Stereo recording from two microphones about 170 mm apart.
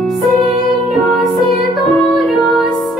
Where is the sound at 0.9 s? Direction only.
Centre (ahead or behind).